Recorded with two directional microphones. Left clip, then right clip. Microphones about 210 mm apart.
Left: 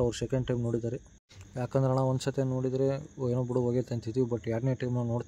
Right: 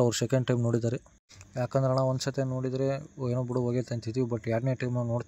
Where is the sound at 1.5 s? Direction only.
15° right (ahead or behind).